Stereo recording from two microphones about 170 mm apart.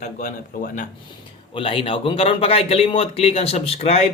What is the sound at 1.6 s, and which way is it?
A man's voice, 30° left (ahead or behind).